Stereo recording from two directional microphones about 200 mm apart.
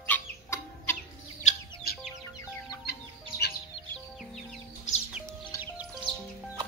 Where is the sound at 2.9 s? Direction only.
50° left (ahead or behind).